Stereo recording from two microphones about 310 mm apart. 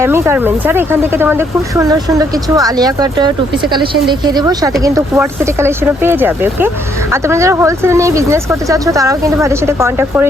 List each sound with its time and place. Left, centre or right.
0.0 s speech: centre